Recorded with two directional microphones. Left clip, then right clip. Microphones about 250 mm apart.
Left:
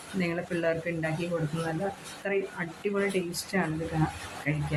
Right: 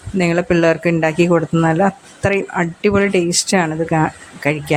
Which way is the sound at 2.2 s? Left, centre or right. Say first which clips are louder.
Right 14 dB; right.